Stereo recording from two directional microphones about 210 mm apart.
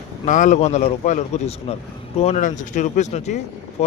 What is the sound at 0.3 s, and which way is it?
Speech, 35° left (ahead or behind).